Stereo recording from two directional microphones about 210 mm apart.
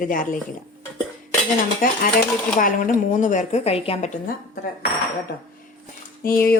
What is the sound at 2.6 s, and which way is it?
A woman's voice, 40° left (ahead or behind).